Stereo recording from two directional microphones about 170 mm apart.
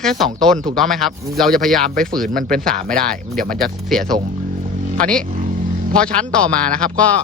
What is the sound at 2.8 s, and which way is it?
Speech, 50° right (ahead or behind).